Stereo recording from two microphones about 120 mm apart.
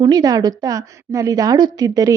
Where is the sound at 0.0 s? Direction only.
35° right (ahead or behind).